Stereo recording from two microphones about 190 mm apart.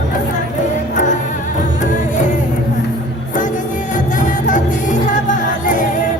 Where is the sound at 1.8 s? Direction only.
40° left (ahead or behind).